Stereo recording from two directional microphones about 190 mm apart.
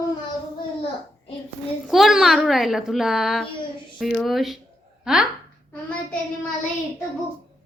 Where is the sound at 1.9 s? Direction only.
Centre (ahead or behind).